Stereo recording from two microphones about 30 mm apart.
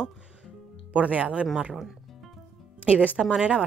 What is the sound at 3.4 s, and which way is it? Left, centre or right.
Speech, right.